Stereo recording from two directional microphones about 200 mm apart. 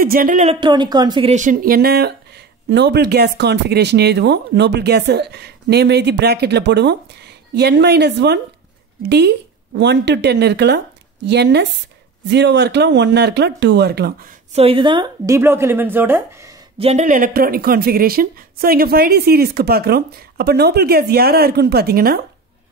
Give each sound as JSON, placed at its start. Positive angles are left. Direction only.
{"t": 0.0, "sound": "speech", "side_deg": -45}
{"t": 0.6, "sound": "speech", "side_deg": -20}
{"t": 1.3, "sound": "speech", "side_deg": -40}
{"t": 14.5, "sound": "a woman's voice", "side_deg": -30}
{"t": 16.7, "sound": "speech", "side_deg": -30}